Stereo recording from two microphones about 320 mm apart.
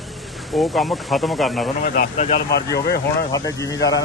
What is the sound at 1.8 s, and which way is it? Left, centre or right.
Speech, left.